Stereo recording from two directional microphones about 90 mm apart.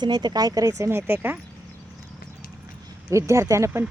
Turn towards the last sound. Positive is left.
turn(degrees=-35)  # may be behind; listen again after turning